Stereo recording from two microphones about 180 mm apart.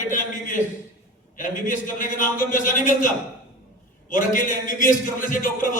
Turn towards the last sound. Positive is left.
turn(degrees=50)  # may be behind; listen again after turning